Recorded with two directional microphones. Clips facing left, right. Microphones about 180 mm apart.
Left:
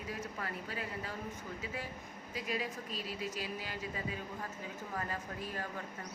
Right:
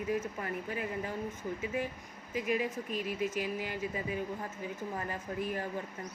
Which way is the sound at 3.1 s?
15° right (ahead or behind).